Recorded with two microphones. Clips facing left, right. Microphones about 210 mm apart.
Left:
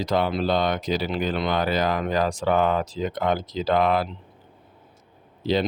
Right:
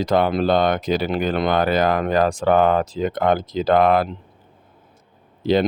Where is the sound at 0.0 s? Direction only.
55° right (ahead or behind).